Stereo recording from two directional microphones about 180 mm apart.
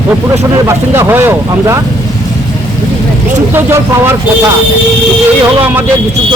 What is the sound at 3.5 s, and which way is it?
Speech, 15° right (ahead or behind).